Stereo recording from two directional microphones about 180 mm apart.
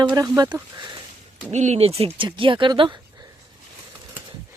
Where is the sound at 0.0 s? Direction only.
20° right (ahead or behind).